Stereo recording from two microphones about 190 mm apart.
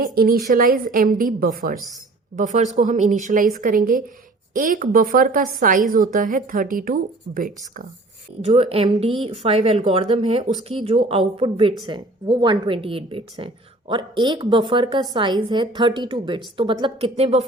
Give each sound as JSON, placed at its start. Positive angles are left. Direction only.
{"t": 0.0, "sound": "a woman's voice", "side_deg": -50}
{"t": 8.4, "sound": "speech", "side_deg": -30}